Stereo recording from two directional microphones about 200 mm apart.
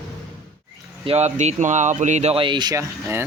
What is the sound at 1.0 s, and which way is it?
Speech, 30° right (ahead or behind).